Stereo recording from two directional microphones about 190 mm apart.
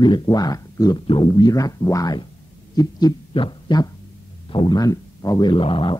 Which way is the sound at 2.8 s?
20° left (ahead or behind).